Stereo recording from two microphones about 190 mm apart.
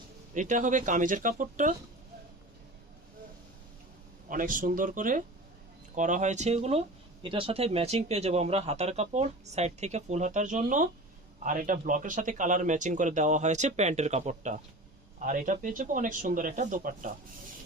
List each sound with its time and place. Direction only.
0.3 s speech: 40° right (ahead or behind)
4.3 s speech: 45° right (ahead or behind)